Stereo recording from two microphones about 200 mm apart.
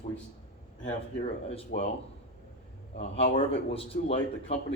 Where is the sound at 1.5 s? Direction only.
30° left (ahead or behind).